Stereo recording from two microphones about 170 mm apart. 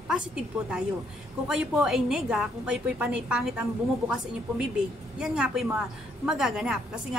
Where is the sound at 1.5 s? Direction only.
Centre (ahead or behind).